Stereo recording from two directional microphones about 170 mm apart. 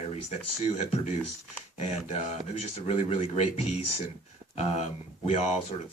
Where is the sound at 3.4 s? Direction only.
35° left (ahead or behind).